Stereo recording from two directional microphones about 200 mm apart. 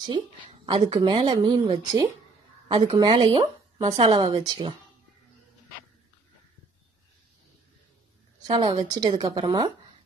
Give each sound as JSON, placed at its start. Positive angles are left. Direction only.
{"t": 0.0, "sound": "speech", "side_deg": -25}
{"t": 8.5, "sound": "speech", "side_deg": -20}